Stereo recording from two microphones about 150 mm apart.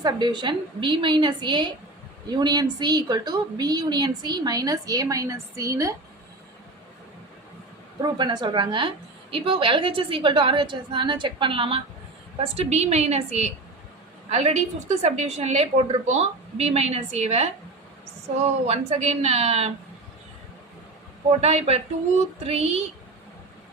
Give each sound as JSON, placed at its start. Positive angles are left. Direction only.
{"t": 0.0, "sound": "a woman's voice", "side_deg": -30}
{"t": 8.0, "sound": "a woman's voice", "side_deg": -30}
{"t": 18.6, "sound": "a woman's voice", "side_deg": -45}
{"t": 21.2, "sound": "a woman's voice", "side_deg": -45}